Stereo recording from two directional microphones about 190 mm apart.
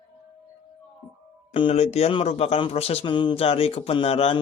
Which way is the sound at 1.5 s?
30° left (ahead or behind).